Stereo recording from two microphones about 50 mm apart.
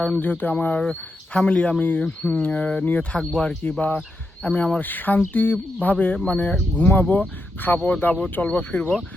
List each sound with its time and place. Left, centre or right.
0.2 s speech: left
0.6 s speech: left
3.2 s speech: centre
3.6 s speech: left
4.8 s speech: left
6.7 s speech: left
8.4 s speech: left